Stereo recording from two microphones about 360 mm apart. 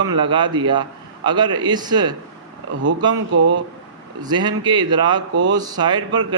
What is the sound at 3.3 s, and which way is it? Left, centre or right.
Speech, right.